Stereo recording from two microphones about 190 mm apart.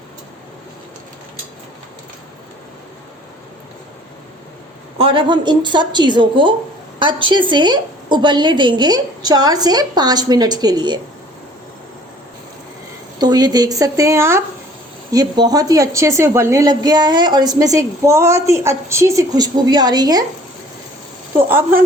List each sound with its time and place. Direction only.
4.9 s a woman's voice: 30° right (ahead or behind)
13.1 s a woman's voice: 20° right (ahead or behind)
21.5 s speech: 10° right (ahead or behind)